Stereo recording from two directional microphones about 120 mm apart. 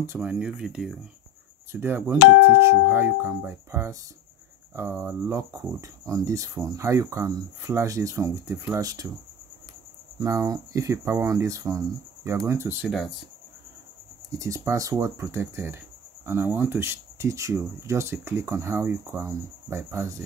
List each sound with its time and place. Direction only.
0.2 s speech: 10° right (ahead or behind)
1.7 s speech: 20° right (ahead or behind)
10.1 s speech: 30° right (ahead or behind)
14.4 s speech: 25° right (ahead or behind)